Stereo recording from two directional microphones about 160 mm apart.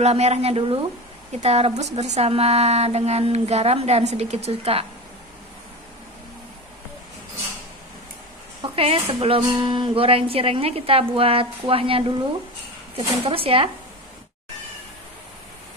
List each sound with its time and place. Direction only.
0.0 s a woman's voice: 40° right (ahead or behind)
8.7 s a woman's voice: 35° right (ahead or behind)